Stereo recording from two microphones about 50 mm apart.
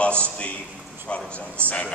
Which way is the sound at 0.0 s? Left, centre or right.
Left.